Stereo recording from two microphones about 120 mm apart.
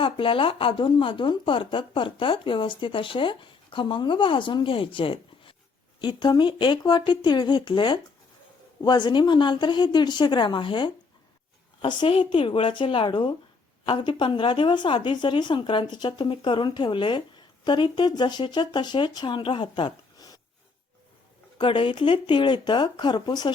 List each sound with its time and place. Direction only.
0.0 s a woman's voice: 45° left (ahead or behind)
21.6 s a woman's voice: 45° left (ahead or behind)